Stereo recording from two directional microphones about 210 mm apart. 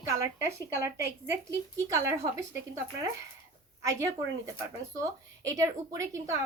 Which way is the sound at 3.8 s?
15° right (ahead or behind).